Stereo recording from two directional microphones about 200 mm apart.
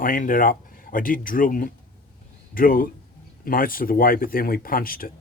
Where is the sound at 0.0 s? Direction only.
45° left (ahead or behind).